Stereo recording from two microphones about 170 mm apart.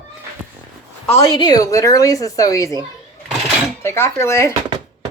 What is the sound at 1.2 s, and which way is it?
Speech, 25° left (ahead or behind).